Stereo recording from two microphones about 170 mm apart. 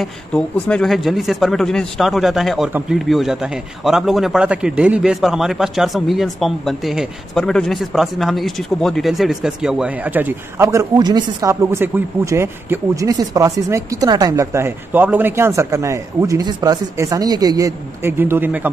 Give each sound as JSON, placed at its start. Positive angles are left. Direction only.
{"t": 0.0, "sound": "a man's voice", "side_deg": 5}